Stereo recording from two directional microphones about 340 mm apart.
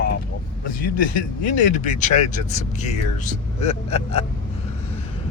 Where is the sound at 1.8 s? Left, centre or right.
Left.